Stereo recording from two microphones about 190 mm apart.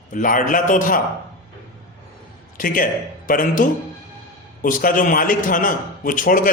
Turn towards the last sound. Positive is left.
turn(degrees=45)  # may be behind; listen again after turning